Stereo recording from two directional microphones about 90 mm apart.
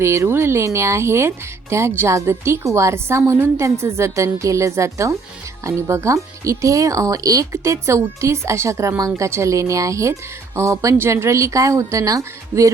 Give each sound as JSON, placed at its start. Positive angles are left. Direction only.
{"t": 0.0, "sound": "speech", "side_deg": -30}